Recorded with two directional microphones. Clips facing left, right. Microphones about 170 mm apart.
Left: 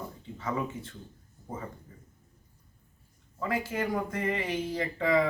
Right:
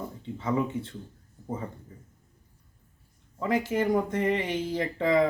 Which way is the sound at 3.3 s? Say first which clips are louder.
Right 5 dB; 20° right (ahead or behind).